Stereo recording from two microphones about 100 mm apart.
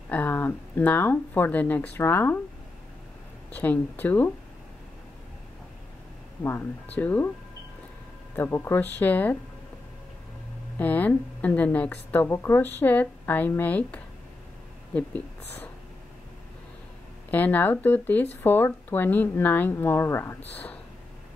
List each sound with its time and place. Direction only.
0.1 s speech: 20° left (ahead or behind)
3.5 s speech: 15° left (ahead or behind)
7.0 s speech: 20° left (ahead or behind)
8.4 s speech: 25° left (ahead or behind)
10.8 s speech: 15° left (ahead or behind)
17.3 s speech: 15° left (ahead or behind)